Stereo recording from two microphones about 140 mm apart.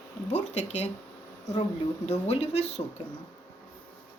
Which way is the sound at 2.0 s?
50° left (ahead or behind).